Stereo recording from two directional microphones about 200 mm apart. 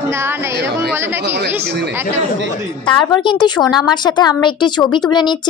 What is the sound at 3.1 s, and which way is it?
A woman's voice, 20° left (ahead or behind).